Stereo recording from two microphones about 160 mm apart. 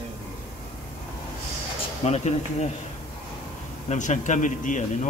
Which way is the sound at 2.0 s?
45° left (ahead or behind).